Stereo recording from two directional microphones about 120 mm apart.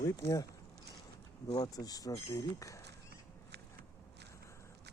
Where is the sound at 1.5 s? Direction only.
35° left (ahead or behind).